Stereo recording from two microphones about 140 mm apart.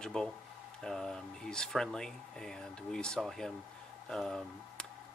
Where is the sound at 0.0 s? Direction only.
5° left (ahead or behind).